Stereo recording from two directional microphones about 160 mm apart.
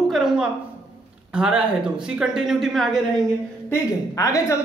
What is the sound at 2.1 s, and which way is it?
Speech, 5° right (ahead or behind).